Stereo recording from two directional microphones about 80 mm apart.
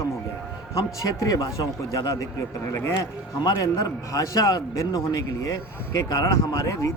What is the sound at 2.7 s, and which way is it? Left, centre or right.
Speech, left.